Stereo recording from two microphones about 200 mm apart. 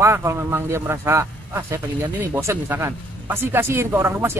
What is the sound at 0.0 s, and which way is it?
Speech, 15° right (ahead or behind).